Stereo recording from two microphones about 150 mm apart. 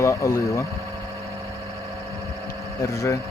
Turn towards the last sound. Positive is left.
turn(degrees=20)  # may be behind; listen again after turning